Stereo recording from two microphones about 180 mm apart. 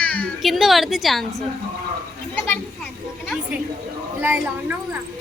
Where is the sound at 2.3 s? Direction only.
10° left (ahead or behind).